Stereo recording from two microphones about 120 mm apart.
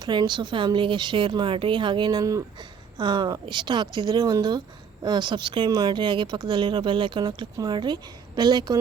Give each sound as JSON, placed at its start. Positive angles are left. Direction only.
{"t": 0.0, "sound": "speech", "side_deg": -35}